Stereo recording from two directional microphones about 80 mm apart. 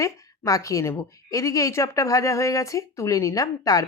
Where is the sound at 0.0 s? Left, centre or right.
Left.